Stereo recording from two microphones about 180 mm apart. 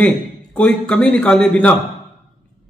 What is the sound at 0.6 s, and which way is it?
A man's voice, 5° left (ahead or behind).